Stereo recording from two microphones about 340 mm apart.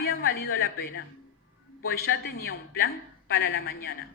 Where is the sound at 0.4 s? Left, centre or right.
Left.